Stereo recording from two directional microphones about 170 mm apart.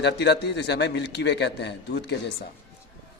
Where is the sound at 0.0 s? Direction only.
85° left.